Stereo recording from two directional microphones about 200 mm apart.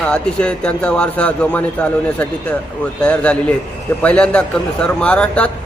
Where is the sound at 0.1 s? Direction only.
5° left (ahead or behind).